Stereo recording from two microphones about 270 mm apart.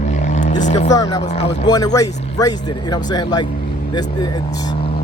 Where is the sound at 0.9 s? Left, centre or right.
Centre.